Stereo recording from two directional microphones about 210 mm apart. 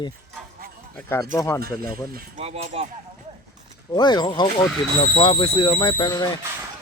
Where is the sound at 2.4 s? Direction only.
30° right (ahead or behind).